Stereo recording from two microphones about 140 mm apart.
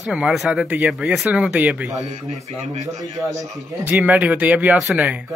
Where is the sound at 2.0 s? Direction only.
55° right (ahead or behind).